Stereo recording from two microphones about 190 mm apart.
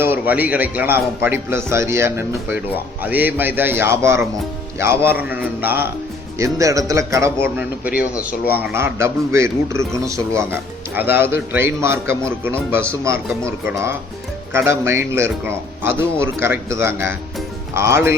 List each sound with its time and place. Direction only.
0.0 s a man's voice: 10° right (ahead or behind)
8.7 s a man's voice: 15° right (ahead or behind)